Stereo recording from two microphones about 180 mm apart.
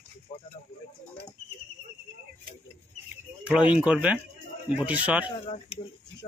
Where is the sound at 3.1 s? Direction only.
5° right (ahead or behind).